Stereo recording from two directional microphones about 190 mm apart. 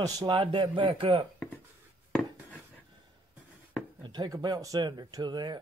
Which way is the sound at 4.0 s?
20° right (ahead or behind).